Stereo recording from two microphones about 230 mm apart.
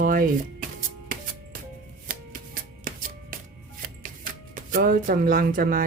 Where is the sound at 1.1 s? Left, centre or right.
Right.